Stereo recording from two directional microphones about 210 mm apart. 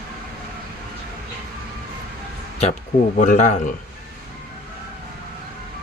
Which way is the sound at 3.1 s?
35° left (ahead or behind).